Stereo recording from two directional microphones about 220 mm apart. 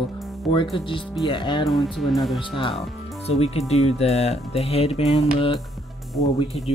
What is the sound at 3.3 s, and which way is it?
Speech, 30° left (ahead or behind).